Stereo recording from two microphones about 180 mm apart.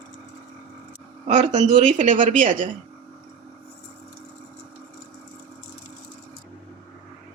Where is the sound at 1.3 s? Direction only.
40° right (ahead or behind).